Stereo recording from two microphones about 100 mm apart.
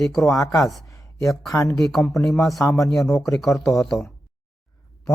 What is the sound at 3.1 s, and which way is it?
Speech, 30° left (ahead or behind).